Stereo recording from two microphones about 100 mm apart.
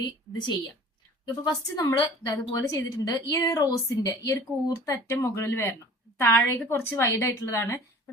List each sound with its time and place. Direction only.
1.2 s a woman's voice: 45° left (ahead or behind); by 7.8 s 25° left (ahead or behind)